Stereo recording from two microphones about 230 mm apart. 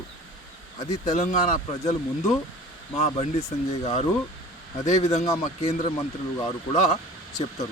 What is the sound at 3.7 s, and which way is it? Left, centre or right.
A man's voice, left.